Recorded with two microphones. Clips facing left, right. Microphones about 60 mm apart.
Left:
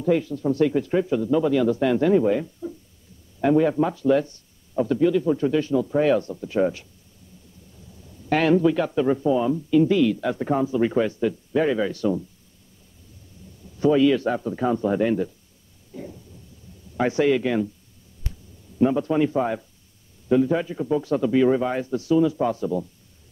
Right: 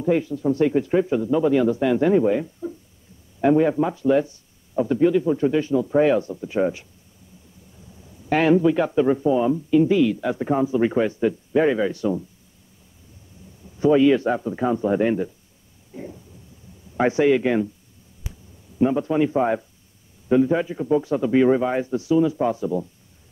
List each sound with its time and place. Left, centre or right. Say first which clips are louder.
0.0 s speech: right 1 dB; centre
2.6 s a sound: right 2 dB; right
3.3 s speech: right 1 dB; centre
8.3 s speech: right 1 dB; centre
13.7 s speech: right 2 dB; right
15.9 s a sound: right 1 dB; right
16.9 s speech: right 2 dB; right
18.3 s a sound: left 1 dB; centre
18.8 s speech: even; centre